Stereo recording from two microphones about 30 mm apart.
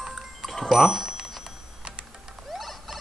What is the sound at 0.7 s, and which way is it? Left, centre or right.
Speech, centre.